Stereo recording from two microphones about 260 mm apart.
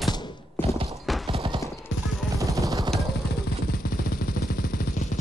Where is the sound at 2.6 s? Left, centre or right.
Centre.